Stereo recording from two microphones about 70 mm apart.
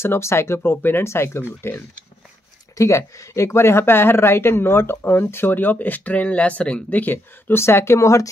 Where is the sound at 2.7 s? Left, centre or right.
Left.